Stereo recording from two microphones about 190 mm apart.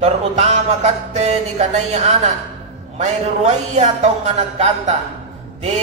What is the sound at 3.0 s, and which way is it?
A man's voice, 40° right (ahead or behind).